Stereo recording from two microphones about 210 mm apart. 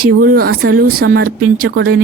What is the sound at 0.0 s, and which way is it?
Speech, 45° right (ahead or behind).